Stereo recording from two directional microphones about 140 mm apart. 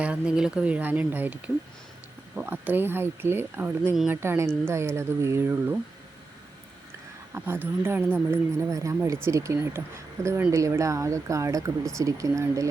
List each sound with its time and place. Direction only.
0.0 s speech: 5° right (ahead or behind)
7.3 s speech: 15° right (ahead or behind)